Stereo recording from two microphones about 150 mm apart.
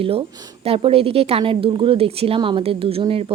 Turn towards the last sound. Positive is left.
turn(degrees=-40)  # may be behind; listen again after turning